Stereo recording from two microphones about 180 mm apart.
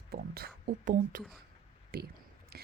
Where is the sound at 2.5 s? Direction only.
60° right (ahead or behind).